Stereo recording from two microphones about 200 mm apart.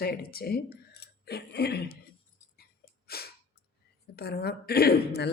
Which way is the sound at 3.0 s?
50° left (ahead or behind).